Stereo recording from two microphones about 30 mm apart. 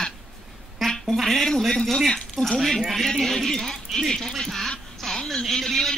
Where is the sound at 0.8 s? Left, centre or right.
Centre.